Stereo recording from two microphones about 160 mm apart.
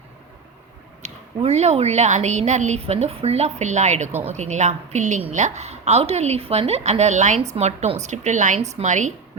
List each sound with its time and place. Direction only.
1.0 s a woman's voice: 45° right (ahead or behind)